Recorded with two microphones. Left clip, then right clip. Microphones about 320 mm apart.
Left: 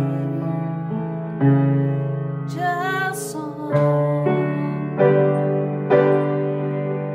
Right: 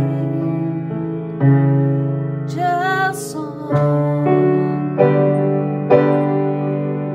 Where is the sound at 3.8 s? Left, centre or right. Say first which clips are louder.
Right 1 dB; right.